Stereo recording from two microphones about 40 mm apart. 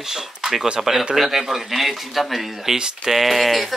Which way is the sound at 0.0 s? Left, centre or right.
Centre.